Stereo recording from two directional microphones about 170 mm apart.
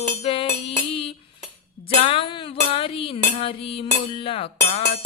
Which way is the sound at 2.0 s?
30° left (ahead or behind).